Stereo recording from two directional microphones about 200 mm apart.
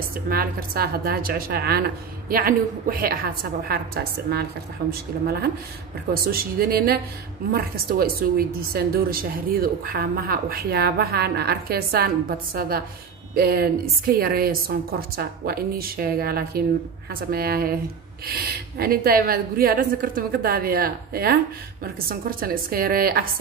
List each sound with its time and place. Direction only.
0.3 s a woman's voice: 50° right (ahead or behind)
6.2 s a woman's voice: 50° right (ahead or behind)
22.4 s a woman's voice: 50° right (ahead or behind)